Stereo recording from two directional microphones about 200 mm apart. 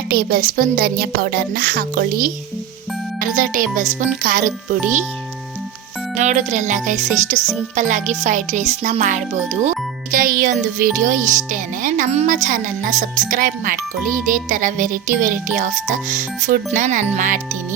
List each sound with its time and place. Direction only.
0.1 s speech: 50° right (ahead or behind)
6.1 s a child's voice: 35° right (ahead or behind)